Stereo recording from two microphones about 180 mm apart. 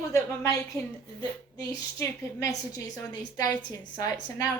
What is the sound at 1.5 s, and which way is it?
A woman's voice, 20° left (ahead or behind).